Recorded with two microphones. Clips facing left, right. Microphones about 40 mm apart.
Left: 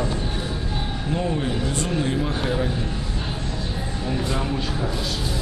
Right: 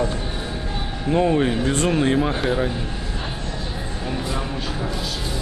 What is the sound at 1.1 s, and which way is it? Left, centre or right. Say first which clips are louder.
Speech: right 7 dB; right.